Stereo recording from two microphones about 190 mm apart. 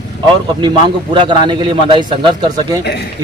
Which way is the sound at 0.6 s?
25° right (ahead or behind).